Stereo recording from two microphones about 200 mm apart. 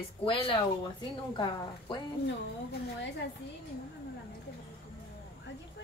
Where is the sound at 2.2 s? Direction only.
55° left (ahead or behind).